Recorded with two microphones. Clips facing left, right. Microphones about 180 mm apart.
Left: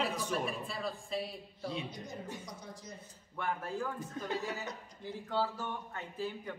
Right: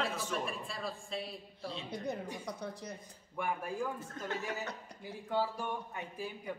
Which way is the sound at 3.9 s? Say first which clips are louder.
Left 2 dB; 15° left (ahead or behind).